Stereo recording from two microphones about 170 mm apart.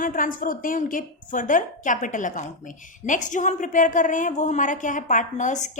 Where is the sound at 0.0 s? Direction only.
55° left (ahead or behind).